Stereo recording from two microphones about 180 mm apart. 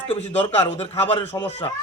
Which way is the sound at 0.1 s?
30° left (ahead or behind).